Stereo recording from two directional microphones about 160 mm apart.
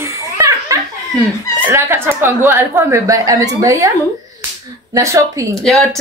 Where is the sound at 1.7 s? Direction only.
10° right (ahead or behind).